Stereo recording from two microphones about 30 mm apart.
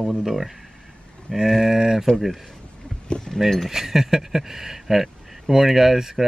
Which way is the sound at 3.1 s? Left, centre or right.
Left.